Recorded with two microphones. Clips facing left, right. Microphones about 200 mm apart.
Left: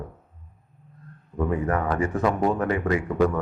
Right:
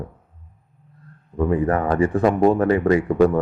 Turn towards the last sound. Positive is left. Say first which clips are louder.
# right 6 dB
turn(degrees=-35)  # may be behind; listen again after turning